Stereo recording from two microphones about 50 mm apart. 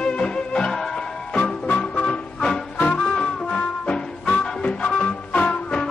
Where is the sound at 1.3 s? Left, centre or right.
Left.